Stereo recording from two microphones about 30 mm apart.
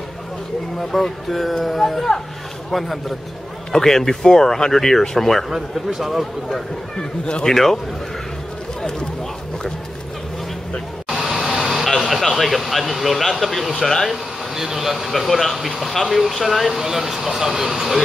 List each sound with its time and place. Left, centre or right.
0.7 s speech: centre
2.7 s speech: centre
3.7 s speech: centre
5.5 s speech: centre
7.0 s speech: left
7.4 s speech: centre
11.1 s vehicle: centre
11.9 s a sound: centre
14.5 s speech: centre